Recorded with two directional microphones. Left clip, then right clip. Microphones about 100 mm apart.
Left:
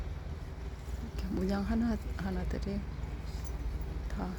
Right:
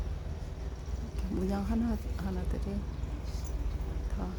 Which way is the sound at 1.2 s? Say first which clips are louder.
Even; 10° left (ahead or behind).